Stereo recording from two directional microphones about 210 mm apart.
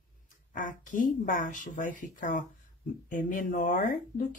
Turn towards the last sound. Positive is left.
turn(degrees=40)  # may be behind; listen again after turning